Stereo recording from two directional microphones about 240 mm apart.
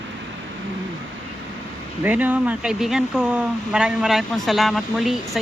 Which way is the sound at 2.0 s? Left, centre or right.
Centre.